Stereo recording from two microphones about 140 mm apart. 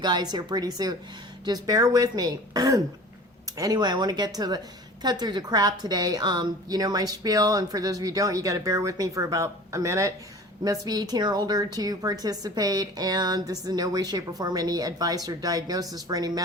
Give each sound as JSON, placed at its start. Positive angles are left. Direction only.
{"t": 0.0, "sound": "a woman's voice", "side_deg": -30}